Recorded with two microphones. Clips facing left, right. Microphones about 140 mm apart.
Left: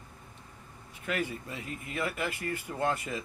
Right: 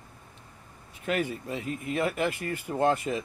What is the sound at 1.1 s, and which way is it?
Speech, 25° right (ahead or behind).